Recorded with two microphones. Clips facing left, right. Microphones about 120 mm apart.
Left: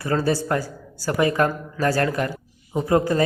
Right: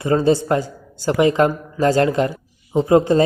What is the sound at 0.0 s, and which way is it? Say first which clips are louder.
Speech: right 6 dB; 20° right (ahead or behind).